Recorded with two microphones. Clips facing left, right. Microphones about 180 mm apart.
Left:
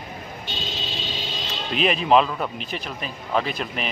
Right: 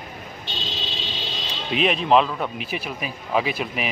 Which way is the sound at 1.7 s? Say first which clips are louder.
Even; centre (ahead or behind).